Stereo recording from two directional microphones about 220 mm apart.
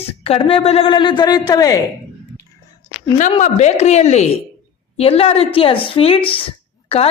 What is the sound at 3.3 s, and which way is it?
A woman's voice, 30° left (ahead or behind).